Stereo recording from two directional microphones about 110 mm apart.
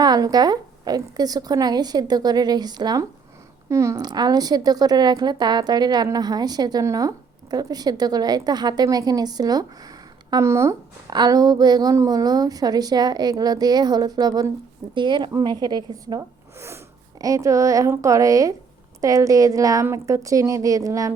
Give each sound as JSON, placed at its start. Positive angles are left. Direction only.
{"t": 0.0, "sound": "a woman's voice", "side_deg": -35}
{"t": 3.7, "sound": "a woman's voice", "side_deg": -25}
{"t": 4.0, "sound": "a woman's voice", "side_deg": -40}
{"t": 11.1, "sound": "a woman's voice", "side_deg": -35}
{"t": 16.6, "sound": "a woman's voice", "side_deg": -25}